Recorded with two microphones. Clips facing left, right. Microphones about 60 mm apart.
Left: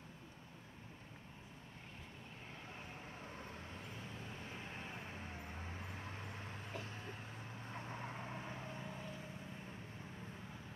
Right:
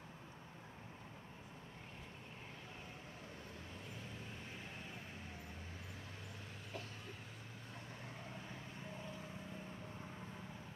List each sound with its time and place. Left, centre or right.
5.3 s vehicle: left